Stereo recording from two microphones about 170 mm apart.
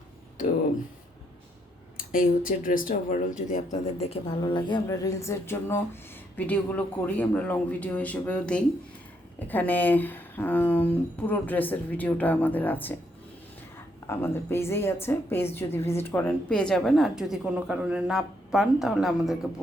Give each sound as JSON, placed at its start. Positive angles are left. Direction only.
{"t": 2.0, "sound": "a woman's voice", "side_deg": 55}